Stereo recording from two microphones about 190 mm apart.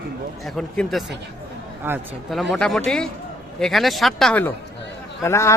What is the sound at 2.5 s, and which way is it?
A man's voice, centre (ahead or behind).